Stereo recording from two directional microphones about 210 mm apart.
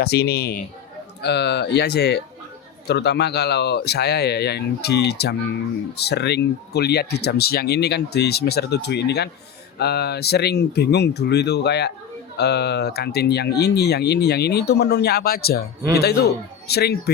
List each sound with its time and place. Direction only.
0.0 s speech: 50° left (ahead or behind)